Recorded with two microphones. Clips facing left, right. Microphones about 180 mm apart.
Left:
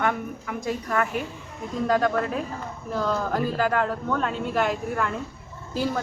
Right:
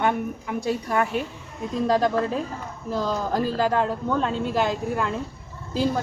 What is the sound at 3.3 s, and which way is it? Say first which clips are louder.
Speech: right 4 dB; 25° right (ahead or behind).